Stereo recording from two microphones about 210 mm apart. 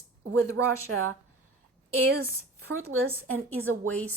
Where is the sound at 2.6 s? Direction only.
90° right.